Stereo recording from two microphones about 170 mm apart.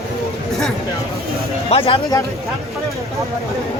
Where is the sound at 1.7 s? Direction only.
35° left (ahead or behind).